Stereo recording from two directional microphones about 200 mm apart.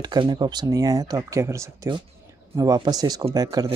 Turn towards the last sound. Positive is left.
turn(degrees=-20)  # may be behind; listen again after turning